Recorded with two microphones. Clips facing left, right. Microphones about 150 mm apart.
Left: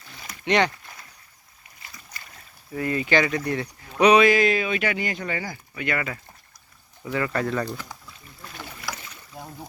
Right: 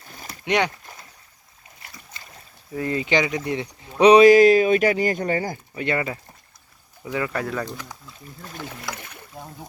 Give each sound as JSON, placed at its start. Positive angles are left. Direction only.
{"t": 0.0, "sound": "a sound", "side_deg": -45}
{"t": 0.4, "sound": "speech", "side_deg": -10}
{"t": 2.1, "sound": "boat", "side_deg": -25}
{"t": 2.7, "sound": "speech", "side_deg": -25}
{"t": 4.0, "sound": "speech", "side_deg": -35}
{"t": 5.8, "sound": "speech", "side_deg": -25}
{"t": 7.0, "sound": "speech", "side_deg": -10}
{"t": 9.0, "sound": "boat", "side_deg": -60}